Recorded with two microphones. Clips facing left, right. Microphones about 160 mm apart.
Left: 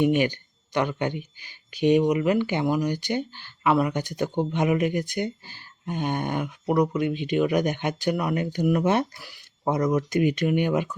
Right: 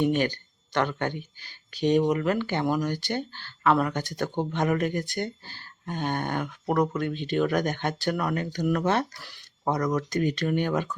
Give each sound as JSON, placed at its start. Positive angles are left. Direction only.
{"t": 0.0, "sound": "speech", "side_deg": 15}
{"t": 9.6, "sound": "speech", "side_deg": 20}